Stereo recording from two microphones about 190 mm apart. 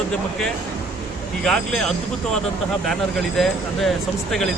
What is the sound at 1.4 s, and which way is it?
Speech, 5° left (ahead or behind).